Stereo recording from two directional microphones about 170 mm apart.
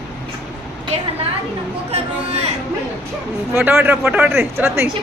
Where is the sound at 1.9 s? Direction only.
40° right (ahead or behind).